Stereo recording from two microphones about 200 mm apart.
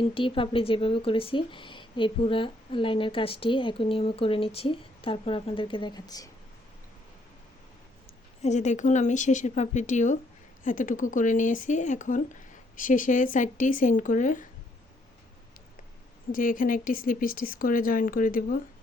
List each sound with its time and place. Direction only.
0.0 s speech: 25° left (ahead or behind)
8.4 s speech: 35° left (ahead or behind)
16.3 s speech: 45° left (ahead or behind)